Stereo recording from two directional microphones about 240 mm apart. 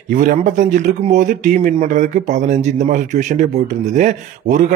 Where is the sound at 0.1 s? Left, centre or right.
Right.